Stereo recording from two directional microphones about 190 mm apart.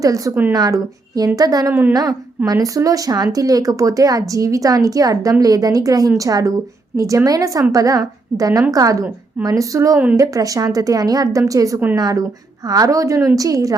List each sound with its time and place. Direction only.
0.0 s a woman's voice: 15° right (ahead or behind)